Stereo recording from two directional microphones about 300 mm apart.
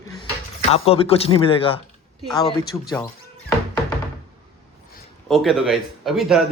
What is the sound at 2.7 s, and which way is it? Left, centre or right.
Speech, centre.